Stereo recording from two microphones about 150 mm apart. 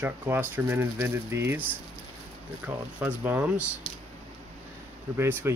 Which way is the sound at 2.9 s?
10° right (ahead or behind).